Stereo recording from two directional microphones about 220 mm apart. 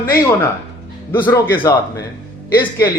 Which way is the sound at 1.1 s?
10° left (ahead or behind).